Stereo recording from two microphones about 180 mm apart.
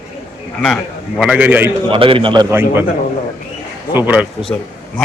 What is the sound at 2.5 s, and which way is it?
Speech, 10° right (ahead or behind).